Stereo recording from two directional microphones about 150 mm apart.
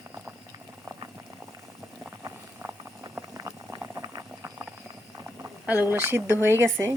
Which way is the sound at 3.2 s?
20° right (ahead or behind).